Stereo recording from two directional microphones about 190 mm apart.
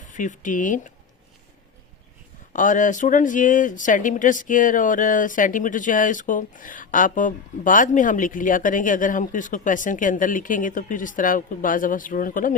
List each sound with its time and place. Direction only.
0.1 s speech: 40° left (ahead or behind)
2.5 s speech: 45° left (ahead or behind)